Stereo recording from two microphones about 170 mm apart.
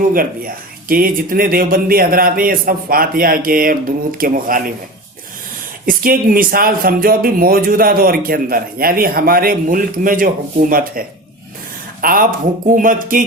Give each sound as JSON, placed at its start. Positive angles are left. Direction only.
{"t": 0.1, "sound": "speech", "side_deg": -55}
{"t": 5.8, "sound": "speech", "side_deg": -55}
{"t": 12.0, "sound": "speech", "side_deg": -55}